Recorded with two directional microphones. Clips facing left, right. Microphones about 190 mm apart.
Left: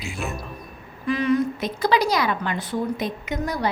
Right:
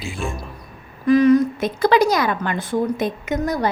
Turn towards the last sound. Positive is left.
turn(degrees=-50)  # may be behind; listen again after turning